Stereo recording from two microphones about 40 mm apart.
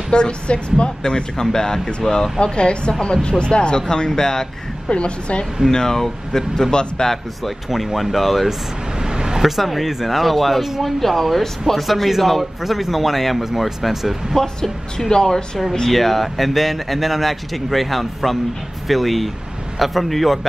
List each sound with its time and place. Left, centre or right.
0.1 s speech: left
4.9 s speech: left
5.7 s speech: centre
7.1 s speech: centre
9.0 s a sound: centre
9.4 s speech: centre
14.3 s speech: centre
15.9 s speech: centre